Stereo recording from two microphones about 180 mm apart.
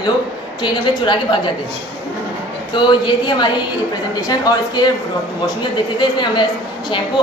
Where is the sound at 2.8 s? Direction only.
25° left (ahead or behind).